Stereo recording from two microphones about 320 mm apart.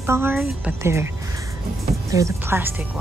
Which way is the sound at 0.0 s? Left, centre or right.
Centre.